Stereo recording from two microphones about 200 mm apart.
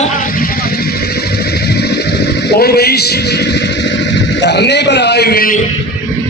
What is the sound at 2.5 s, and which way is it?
Speech, 50° left (ahead or behind).